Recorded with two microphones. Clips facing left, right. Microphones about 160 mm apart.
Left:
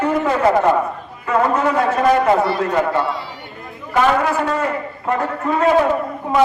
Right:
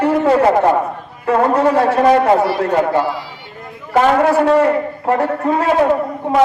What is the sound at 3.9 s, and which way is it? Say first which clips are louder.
A man's voice: right 4 dB; 35° right (ahead or behind).